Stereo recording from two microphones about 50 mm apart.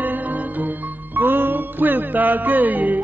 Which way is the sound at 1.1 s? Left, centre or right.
Right.